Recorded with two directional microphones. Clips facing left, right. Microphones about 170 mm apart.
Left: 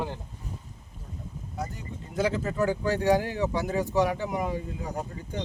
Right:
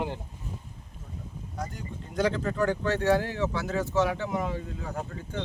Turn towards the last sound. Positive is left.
turn(degrees=15)  # may be behind; listen again after turning